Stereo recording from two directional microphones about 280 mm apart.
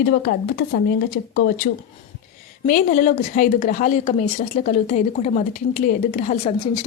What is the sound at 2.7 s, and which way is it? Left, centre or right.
A woman's voice, left.